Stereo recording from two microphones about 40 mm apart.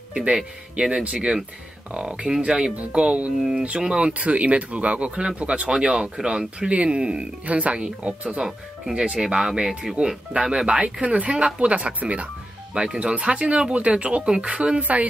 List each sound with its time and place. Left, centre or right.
0.1 s speech: right
2.7 s speech: right
3.8 s speech: right
6.7 s speech: right
8.9 s speech: right
11.4 s speech: right
11.7 s speech: right
12.7 s speech: right
14.8 s speech: right